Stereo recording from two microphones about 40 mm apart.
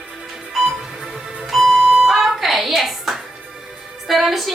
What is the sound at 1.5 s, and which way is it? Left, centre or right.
Music, centre.